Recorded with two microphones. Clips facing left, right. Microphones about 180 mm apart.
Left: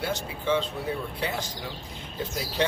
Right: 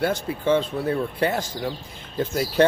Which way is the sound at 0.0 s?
50° right (ahead or behind).